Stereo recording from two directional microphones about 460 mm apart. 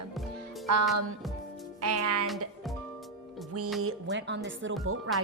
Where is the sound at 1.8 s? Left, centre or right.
Right.